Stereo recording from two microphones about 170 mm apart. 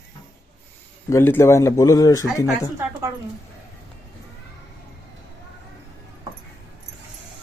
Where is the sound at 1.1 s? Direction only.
15° left (ahead or behind).